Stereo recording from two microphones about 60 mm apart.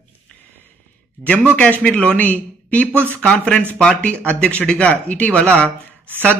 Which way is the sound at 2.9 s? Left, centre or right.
Right.